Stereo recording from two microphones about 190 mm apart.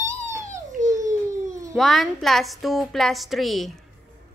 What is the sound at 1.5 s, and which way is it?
Cat, 15° right (ahead or behind).